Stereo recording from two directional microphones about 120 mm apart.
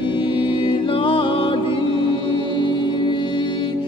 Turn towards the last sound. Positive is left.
turn(degrees=40)  # may be behind; listen again after turning